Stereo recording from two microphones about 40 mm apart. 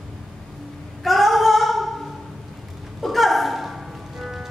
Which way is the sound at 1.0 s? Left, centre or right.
Centre.